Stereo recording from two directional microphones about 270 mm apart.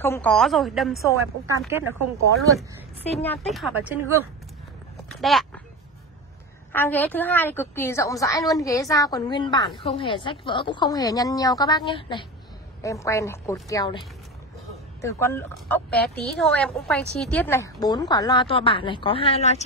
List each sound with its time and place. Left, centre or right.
0.0 s a woman's voice: centre
3.3 s a woman's voice: centre
5.2 s speech: centre
6.7 s a woman's voice: centre; by 19.6 s left